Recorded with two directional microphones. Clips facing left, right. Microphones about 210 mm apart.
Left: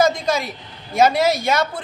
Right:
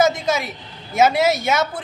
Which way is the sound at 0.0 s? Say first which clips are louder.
Even; 5° right (ahead or behind).